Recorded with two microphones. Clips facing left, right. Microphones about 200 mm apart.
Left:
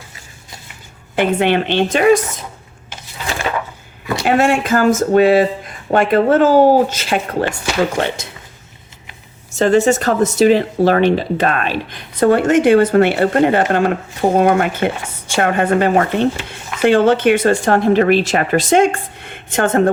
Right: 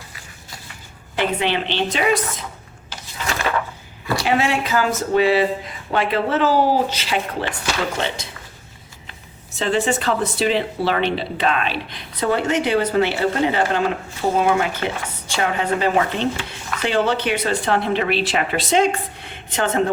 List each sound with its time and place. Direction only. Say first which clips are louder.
1.1 s speech: left 6 dB; 55° left (ahead or behind)
4.2 s speech: left 6 dB; 50° left (ahead or behind)
9.6 s speech: left 8 dB; 45° left (ahead or behind)